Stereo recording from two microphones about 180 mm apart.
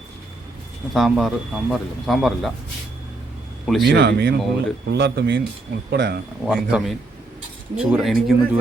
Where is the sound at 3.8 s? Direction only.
65° right (ahead or behind).